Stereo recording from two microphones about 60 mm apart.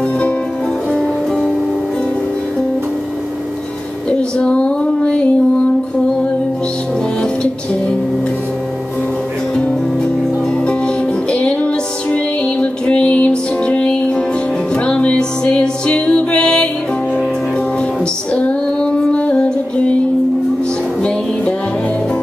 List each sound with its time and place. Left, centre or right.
4.1 s female singing: centre
11.2 s music: centre
18.3 s female singing: left